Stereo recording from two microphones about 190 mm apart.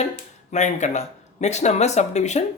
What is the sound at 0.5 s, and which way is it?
Speech, 40° left (ahead or behind).